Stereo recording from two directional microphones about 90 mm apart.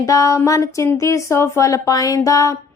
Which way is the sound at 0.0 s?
40° left (ahead or behind).